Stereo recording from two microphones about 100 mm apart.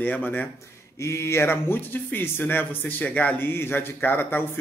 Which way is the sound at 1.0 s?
25° left (ahead or behind).